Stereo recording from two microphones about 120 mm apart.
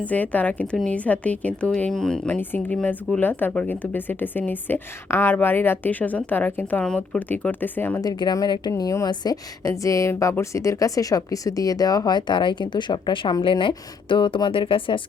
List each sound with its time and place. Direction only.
0.0 s speech: 10° left (ahead or behind)
8.0 s a woman's voice: 35° left (ahead or behind)